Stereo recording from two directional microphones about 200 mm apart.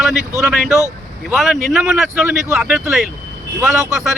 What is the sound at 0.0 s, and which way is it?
Speech, centre (ahead or behind).